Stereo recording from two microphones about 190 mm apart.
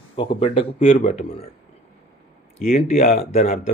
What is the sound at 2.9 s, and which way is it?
Speech, 35° left (ahead or behind).